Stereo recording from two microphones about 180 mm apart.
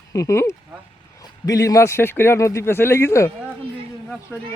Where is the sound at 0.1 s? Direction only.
15° left (ahead or behind).